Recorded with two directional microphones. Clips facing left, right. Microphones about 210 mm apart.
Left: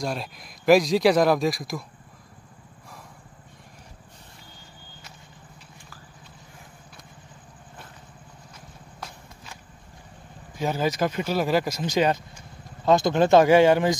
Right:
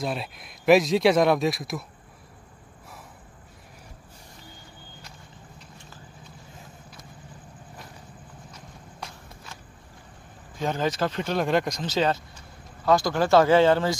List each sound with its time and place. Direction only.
0.0 s speech: centre (ahead or behind)
10.6 s speech: 10° left (ahead or behind)